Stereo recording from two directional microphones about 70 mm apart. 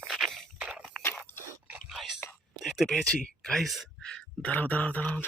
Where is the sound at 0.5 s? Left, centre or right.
Centre.